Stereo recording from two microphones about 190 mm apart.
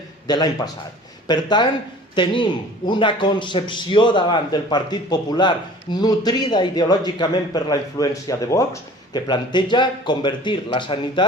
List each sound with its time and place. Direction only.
0.3 s a man's voice: 20° left (ahead or behind)